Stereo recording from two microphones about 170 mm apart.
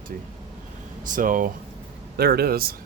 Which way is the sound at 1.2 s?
50° right (ahead or behind).